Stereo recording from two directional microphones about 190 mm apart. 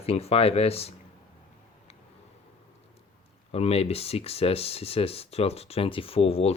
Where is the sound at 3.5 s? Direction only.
35° left (ahead or behind).